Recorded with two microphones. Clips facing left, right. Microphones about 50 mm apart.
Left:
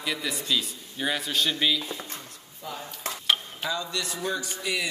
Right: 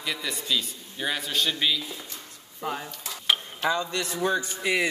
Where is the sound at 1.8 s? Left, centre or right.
Left.